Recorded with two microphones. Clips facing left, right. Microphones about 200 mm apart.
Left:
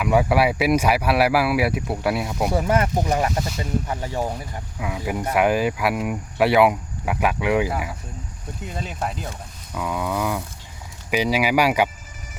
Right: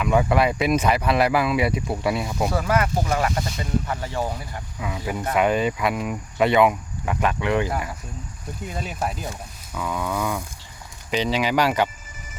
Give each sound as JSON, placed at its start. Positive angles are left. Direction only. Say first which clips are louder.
{"t": 0.0, "sound": "speech", "louder": "left 1 dB", "side_deg": 10}
{"t": 2.5, "sound": "speech", "louder": "left 3 dB", "side_deg": 25}
{"t": 9.7, "sound": "speech", "louder": "left 1 dB", "side_deg": 10}